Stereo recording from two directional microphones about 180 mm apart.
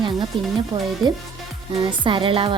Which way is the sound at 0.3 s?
30° right (ahead or behind).